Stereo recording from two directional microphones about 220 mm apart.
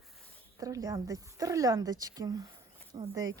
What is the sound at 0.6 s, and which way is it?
A woman's voice, 15° right (ahead or behind).